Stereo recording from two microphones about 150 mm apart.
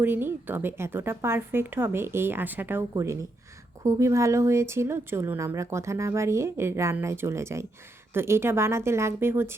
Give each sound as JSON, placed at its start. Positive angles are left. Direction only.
{"t": 0.0, "sound": "a woman's voice", "side_deg": -15}